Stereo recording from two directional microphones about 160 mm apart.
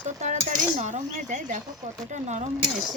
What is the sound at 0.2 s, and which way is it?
Cutlery, 50° right (ahead or behind).